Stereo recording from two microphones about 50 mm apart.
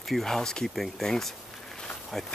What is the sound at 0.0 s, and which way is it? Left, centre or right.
Speech, centre.